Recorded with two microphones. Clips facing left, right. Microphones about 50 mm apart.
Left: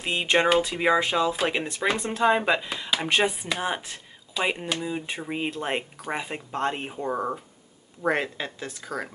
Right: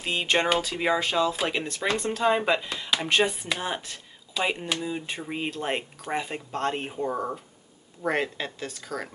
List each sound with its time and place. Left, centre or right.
0.0 s speech: centre
7.0 s speech: centre